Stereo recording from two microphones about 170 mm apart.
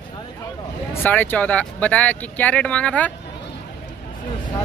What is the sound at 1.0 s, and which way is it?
Speech, 10° left (ahead or behind).